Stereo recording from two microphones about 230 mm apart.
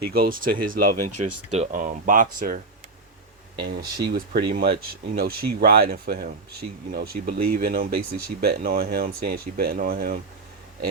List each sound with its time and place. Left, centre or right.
0.1 s speech: right
0.3 s speech: right
0.8 s speech: right
3.6 s speech: right